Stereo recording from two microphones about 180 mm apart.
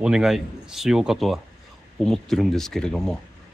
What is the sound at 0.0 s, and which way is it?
A man's voice, 5° right (ahead or behind).